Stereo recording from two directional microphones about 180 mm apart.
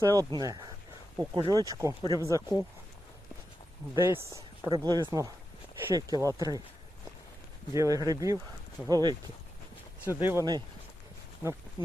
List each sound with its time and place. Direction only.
0.0 s speech: 20° right (ahead or behind)
3.9 s speech: 15° right (ahead or behind)
7.7 s speech: 20° right (ahead or behind)
10.0 s speech: 10° right (ahead or behind)